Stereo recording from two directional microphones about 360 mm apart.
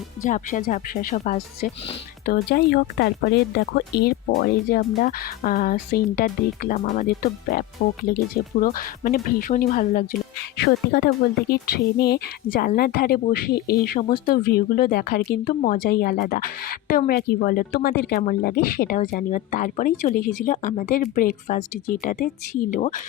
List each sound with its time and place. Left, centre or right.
0.2 s speech: left